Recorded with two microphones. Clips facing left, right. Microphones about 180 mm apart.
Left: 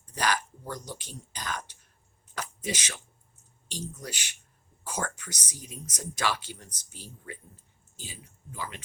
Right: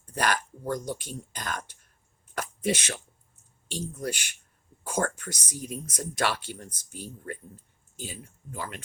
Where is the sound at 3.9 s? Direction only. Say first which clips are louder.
Right 8 dB; 55° right (ahead or behind).